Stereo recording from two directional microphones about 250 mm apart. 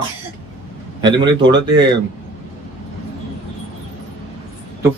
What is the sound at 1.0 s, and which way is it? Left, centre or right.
Speech, centre.